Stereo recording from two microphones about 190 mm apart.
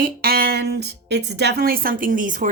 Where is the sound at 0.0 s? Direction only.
50° right (ahead or behind).